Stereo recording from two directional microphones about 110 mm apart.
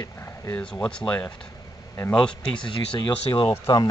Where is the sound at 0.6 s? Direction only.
10° left (ahead or behind).